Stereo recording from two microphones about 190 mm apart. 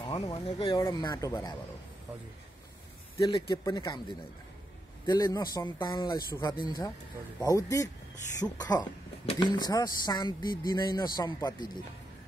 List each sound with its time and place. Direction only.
0.0 s speech: 25° left (ahead or behind)
3.2 s speech: 25° left (ahead or behind)
5.0 s speech: 20° left (ahead or behind)